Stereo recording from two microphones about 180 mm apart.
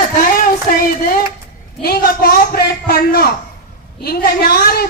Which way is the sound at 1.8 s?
60° left (ahead or behind).